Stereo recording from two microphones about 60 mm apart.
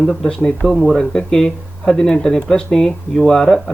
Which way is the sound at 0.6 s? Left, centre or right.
Centre.